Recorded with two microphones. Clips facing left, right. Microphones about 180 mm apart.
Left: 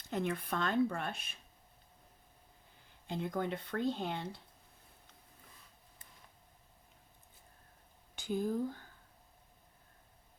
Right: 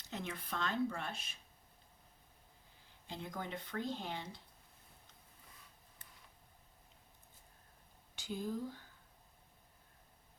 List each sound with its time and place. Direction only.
0.1 s speech: 55° left (ahead or behind)
3.1 s speech: 55° left (ahead or behind)
8.1 s speech: 55° left (ahead or behind)